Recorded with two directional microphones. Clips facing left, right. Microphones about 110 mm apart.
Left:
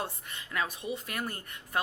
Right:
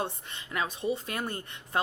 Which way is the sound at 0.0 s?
25° right (ahead or behind).